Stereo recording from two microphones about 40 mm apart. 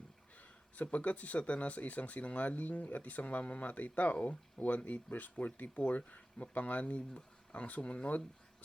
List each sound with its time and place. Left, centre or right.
0.9 s speech: left